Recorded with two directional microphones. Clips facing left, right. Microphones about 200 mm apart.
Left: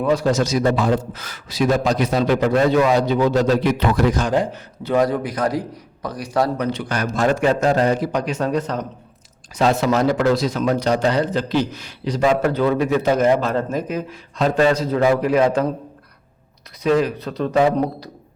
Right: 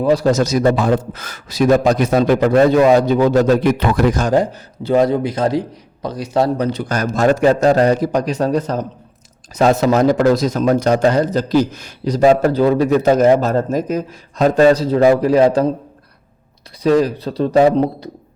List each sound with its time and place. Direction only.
0.0 s a man's voice: 35° right (ahead or behind)
4.8 s a man's voice: 25° right (ahead or behind)
6.7 s a man's voice: 40° right (ahead or behind)
16.8 s a man's voice: 35° right (ahead or behind)